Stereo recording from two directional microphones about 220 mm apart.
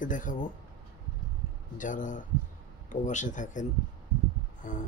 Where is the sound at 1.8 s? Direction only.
35° left (ahead or behind).